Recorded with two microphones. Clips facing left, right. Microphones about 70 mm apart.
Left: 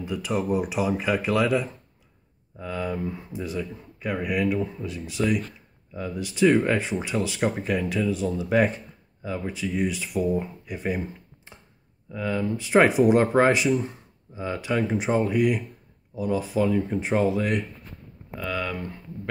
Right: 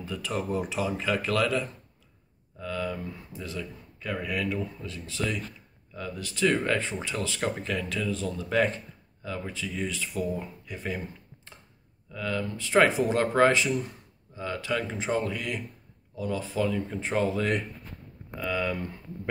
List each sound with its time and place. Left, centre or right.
0.0 s speech: centre
12.1 s speech: centre
18.4 s speech: centre